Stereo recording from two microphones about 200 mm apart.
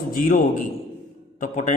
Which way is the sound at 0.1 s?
45° left (ahead or behind).